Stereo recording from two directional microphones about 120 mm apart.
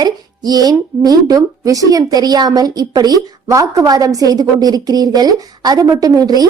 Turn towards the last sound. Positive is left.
turn(degrees=-30)  # may be behind; listen again after turning